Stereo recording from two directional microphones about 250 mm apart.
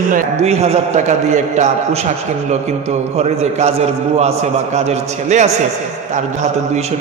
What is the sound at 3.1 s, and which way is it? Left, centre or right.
A man's voice, right.